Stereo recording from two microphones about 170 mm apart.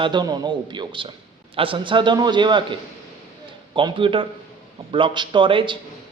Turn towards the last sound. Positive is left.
turn(degrees=-30)  # may be behind; listen again after turning